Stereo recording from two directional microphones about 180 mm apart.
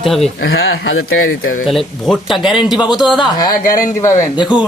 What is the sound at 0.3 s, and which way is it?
Speech, 75° left (ahead or behind).